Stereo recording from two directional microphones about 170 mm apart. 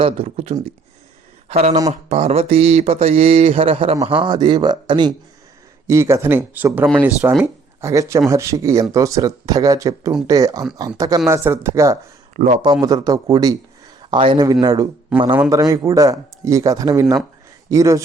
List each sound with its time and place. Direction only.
0.0 s a sound: 35° right (ahead or behind)
4.0 s speech: 30° right (ahead or behind)
12.4 s a man's voice: 50° right (ahead or behind)
12.8 s speech: 20° right (ahead or behind)
15.1 s speech: 5° right (ahead or behind)
15.4 s speech: 20° right (ahead or behind)